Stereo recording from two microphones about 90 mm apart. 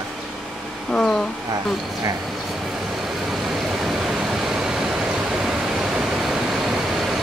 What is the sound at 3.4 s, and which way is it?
Vehicle, centre (ahead or behind).